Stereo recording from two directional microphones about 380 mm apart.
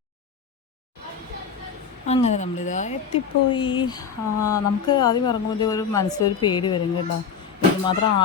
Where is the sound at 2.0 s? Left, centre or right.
Centre.